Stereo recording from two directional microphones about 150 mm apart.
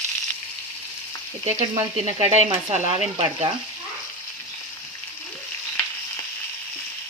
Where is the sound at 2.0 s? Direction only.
45° right (ahead or behind).